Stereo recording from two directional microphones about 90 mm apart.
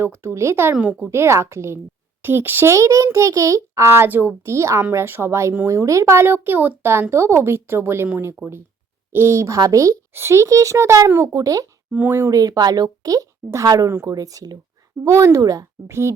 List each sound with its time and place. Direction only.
0.0 s speech: 25° right (ahead or behind)
2.7 s a child's voice: 35° right (ahead or behind)
11.9 s speech: 20° right (ahead or behind)
12.3 s a child's voice: 45° right (ahead or behind)